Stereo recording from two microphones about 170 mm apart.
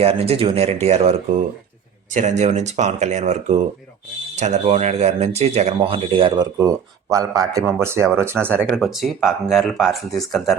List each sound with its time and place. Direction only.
0.0 s speech: 35° right (ahead or behind); by 10.6 s centre (ahead or behind)